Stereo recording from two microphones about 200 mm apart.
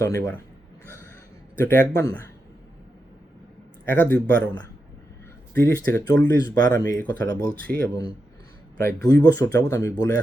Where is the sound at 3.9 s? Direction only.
10° left (ahead or behind).